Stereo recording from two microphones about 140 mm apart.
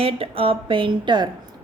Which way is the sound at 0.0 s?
40° right (ahead or behind).